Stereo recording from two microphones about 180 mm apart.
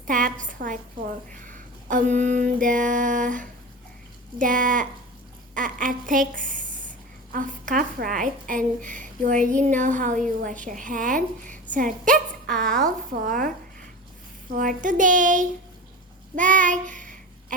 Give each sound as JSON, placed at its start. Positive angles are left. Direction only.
{"t": 0.1, "sound": "a woman's voice", "side_deg": -50}
{"t": 1.4, "sound": "a sound", "side_deg": -45}
{"t": 4.4, "sound": "a woman's voice", "side_deg": -50}
{"t": 5.5, "sound": "a sound", "side_deg": -50}
{"t": 7.3, "sound": "a woman's voice", "side_deg": -45}
{"t": 12.1, "sound": "speech", "side_deg": 5}
{"t": 13.2, "sound": "a woman's voice", "side_deg": -50}
{"t": 14.5, "sound": "a woman's voice", "side_deg": -50}
{"t": 16.3, "sound": "child singing", "side_deg": -45}